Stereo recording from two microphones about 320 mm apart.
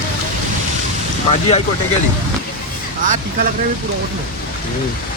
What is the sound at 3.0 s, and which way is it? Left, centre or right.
Speech, right.